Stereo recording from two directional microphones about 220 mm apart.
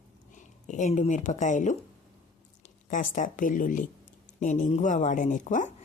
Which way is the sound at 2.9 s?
35° left (ahead or behind).